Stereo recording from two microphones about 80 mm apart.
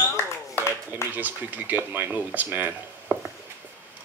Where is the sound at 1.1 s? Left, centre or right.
Right.